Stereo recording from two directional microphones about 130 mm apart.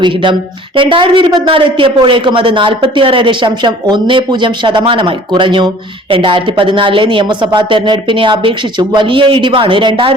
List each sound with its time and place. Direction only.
0.0 s a woman's voice: 35° right (ahead or behind)